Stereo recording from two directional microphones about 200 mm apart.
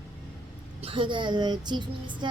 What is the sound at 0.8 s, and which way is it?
A woman's voice, 25° right (ahead or behind).